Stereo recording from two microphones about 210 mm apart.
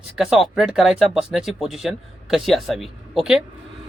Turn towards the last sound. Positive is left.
turn(degrees=0)  # may be behind; listen again after turning